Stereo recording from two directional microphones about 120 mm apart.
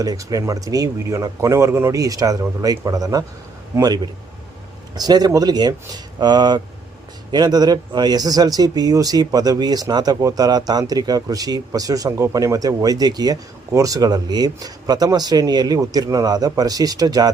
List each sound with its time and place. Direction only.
0.0 s a man's voice: 30° right (ahead or behind)